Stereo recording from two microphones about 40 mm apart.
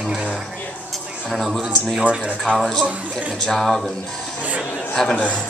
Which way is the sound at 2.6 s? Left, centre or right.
Centre.